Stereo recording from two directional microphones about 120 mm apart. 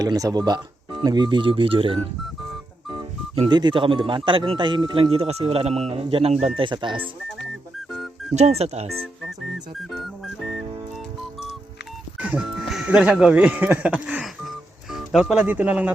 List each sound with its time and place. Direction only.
0.0 s speech: 30° right (ahead or behind); by 2.0 s 50° right (ahead or behind)
3.5 s speech: 40° right (ahead or behind)
5.1 s speech: 55° right (ahead or behind)
7.9 s music: centre (ahead or behind)
8.4 s speech: 60° right (ahead or behind)
12.2 s speech: 5° right (ahead or behind)